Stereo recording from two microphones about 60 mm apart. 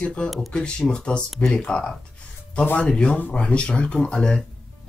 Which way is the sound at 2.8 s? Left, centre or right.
Centre.